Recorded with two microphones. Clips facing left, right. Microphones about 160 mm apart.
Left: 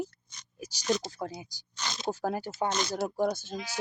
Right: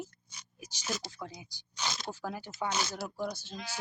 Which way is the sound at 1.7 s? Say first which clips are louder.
Right 1 dB; 10° right (ahead or behind).